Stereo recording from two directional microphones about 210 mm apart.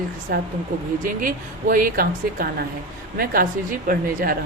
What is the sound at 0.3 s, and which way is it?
A woman's voice, 45° right (ahead or behind).